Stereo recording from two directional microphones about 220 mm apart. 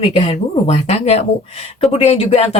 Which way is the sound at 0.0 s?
30° left (ahead or behind).